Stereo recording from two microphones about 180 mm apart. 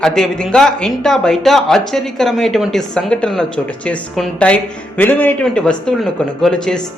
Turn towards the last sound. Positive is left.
turn(degrees=5)  # may be behind; listen again after turning